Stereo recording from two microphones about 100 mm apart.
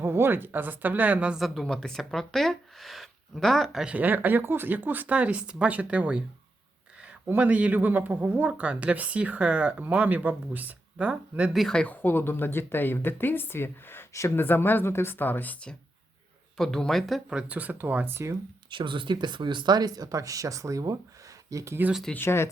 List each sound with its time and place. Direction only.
0.0 s speech: 25° right (ahead or behind)
1.4 s speech: centre (ahead or behind)
3.8 s speech: 15° right (ahead or behind)
11.5 s speech: 5° left (ahead or behind)
12.0 s speech: 20° left (ahead or behind)
16.6 s speech: 5° left (ahead or behind)
17.2 s speech: 10° right (ahead or behind)
18.7 s speech: 55° right (ahead or behind); by 21.8 s 30° right (ahead or behind)
22.1 s speech: 25° left (ahead or behind)